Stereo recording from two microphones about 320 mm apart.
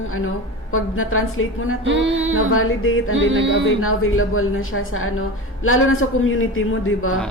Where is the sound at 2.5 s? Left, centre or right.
Left.